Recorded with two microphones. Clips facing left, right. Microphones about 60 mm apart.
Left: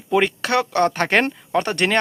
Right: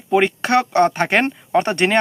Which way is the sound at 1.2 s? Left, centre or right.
Right.